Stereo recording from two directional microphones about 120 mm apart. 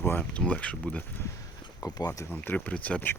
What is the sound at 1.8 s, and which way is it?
Speech, 30° left (ahead or behind).